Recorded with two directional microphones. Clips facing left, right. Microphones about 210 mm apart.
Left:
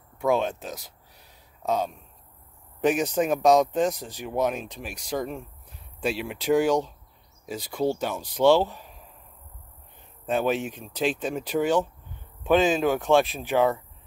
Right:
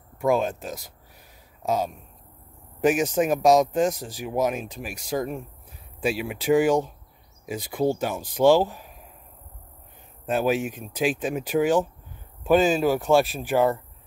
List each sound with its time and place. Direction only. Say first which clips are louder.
0.2 s a man's voice: right 1 dB; 10° right (ahead or behind)
10.2 s speech: right 2 dB; 5° right (ahead or behind)